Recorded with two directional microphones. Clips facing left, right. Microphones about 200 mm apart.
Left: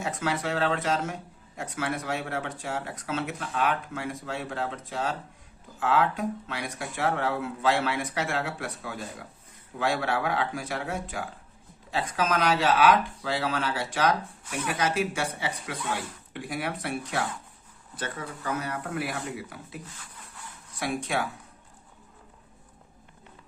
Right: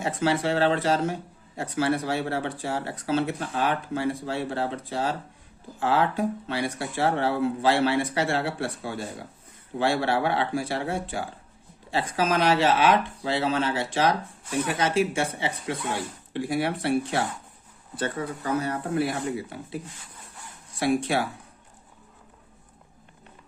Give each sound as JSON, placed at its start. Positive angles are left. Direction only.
{"t": 0.0, "sound": "speech", "side_deg": -30}